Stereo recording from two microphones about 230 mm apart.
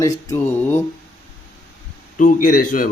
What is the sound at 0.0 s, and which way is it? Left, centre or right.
Speech, centre.